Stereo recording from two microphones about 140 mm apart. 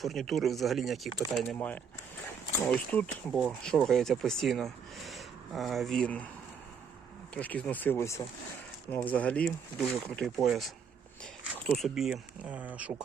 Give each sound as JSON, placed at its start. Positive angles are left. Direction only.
{"t": 0.0, "sound": "speech", "side_deg": 0}
{"t": 1.5, "sound": "speech", "side_deg": 10}
{"t": 7.3, "sound": "speech", "side_deg": 10}
{"t": 11.8, "sound": "speech", "side_deg": -5}